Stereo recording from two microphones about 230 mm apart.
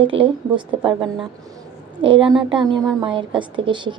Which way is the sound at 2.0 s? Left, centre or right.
Right.